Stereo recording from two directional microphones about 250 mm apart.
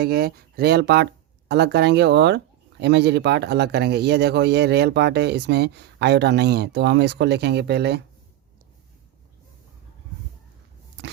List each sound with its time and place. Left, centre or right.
0.0 s speech: right
11.0 s biting: right